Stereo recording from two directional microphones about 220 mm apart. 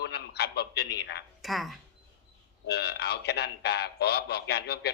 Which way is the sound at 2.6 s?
50° left (ahead or behind).